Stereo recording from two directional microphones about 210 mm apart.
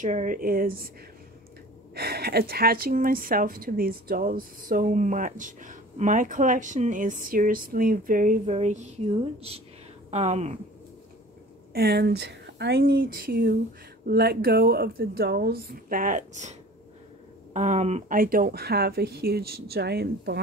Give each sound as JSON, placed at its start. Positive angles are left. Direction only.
{"t": 0.0, "sound": "speech", "side_deg": -35}
{"t": 2.0, "sound": "a woman's voice", "side_deg": -50}
{"t": 11.7, "sound": "speech", "side_deg": -50}